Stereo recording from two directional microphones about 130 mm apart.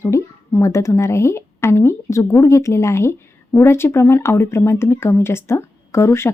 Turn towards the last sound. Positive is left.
turn(degrees=20)  # may be behind; listen again after turning